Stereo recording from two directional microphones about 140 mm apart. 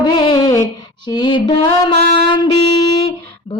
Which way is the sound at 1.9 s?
45° left (ahead or behind).